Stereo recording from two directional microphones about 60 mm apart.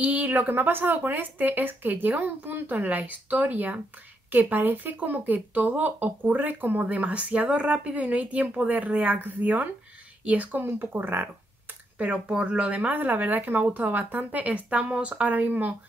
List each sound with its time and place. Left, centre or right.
0.0 s speech: right
12.0 s speech: centre